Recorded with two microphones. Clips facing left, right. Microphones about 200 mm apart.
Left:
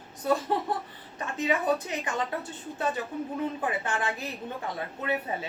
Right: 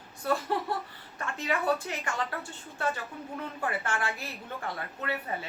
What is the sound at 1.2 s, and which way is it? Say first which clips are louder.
Speech: left 3 dB; 20° left (ahead or behind).